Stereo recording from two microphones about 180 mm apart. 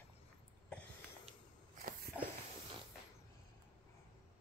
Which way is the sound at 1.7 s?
50° right (ahead or behind).